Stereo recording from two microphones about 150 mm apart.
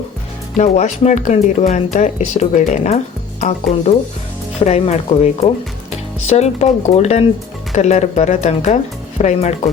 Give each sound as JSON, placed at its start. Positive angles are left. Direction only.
{"t": 0.5, "sound": "speech", "side_deg": 50}